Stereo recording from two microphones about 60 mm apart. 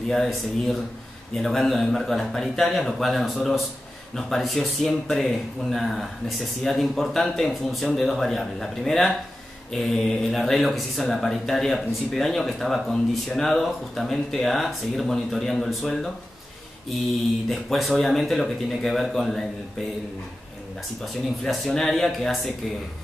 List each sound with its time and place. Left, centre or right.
0.1 s speech: centre
17.5 s speech: centre
21.5 s speech: centre